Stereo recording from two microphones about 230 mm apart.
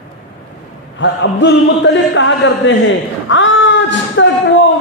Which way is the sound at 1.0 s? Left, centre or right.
Left.